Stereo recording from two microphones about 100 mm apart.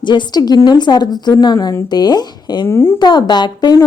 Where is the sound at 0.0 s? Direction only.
50° left (ahead or behind).